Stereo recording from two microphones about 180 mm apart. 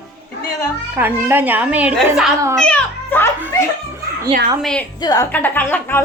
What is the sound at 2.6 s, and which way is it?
Speech, 10° left (ahead or behind).